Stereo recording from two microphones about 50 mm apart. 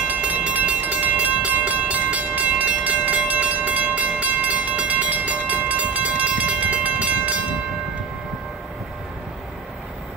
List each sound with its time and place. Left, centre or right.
0.0 s train: right